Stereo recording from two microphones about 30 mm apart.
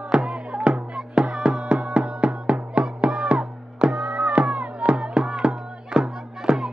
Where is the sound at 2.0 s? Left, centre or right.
Right.